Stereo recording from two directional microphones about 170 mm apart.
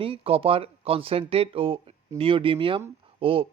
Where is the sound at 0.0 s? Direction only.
35° right (ahead or behind).